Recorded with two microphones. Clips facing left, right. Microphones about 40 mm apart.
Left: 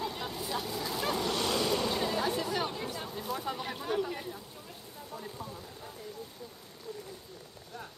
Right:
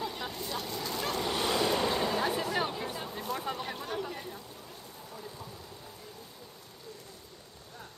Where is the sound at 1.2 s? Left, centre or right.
Centre.